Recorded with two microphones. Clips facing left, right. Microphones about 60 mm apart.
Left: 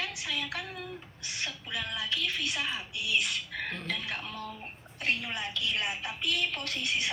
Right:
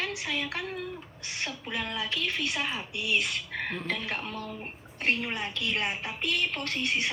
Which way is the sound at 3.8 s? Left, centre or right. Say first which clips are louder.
Right 3 dB; right.